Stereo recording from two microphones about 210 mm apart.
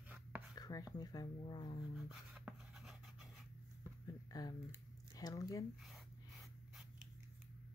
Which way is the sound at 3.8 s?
15° left (ahead or behind).